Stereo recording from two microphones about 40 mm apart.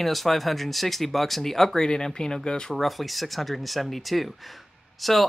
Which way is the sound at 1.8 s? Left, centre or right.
Centre.